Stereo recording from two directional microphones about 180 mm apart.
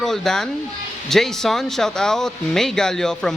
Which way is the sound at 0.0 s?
Centre (ahead or behind).